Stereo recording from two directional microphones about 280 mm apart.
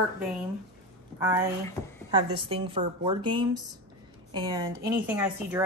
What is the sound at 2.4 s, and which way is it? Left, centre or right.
A woman's voice, centre.